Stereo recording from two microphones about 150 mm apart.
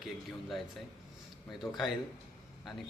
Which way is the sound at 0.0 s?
Centre (ahead or behind).